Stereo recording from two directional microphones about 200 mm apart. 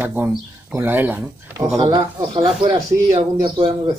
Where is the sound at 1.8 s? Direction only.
25° right (ahead or behind).